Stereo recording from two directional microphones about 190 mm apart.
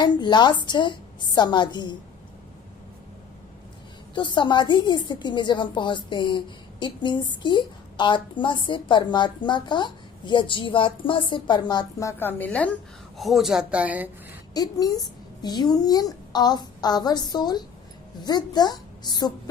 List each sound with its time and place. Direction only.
0.0 s a woman's voice: 25° left (ahead or behind)
4.1 s a woman's voice: 25° left (ahead or behind); by 14.1 s 10° right (ahead or behind)
14.5 s a woman's voice: 20° left (ahead or behind)